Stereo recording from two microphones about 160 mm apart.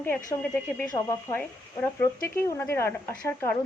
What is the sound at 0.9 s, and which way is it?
Speech, 15° left (ahead or behind).